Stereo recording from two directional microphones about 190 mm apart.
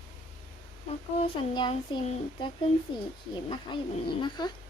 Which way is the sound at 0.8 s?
30° left (ahead or behind).